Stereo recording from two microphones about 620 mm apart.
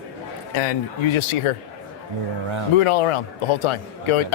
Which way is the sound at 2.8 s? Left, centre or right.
Left.